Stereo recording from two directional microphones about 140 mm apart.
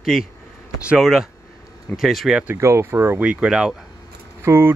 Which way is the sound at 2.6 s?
20° right (ahead or behind).